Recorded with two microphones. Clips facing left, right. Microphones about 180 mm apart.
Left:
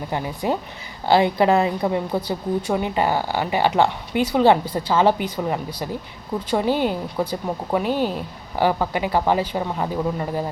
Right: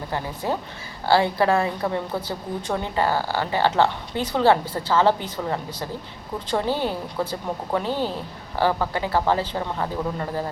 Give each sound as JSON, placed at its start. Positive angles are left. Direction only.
{"t": 0.1, "sound": "a woman's voice", "side_deg": 15}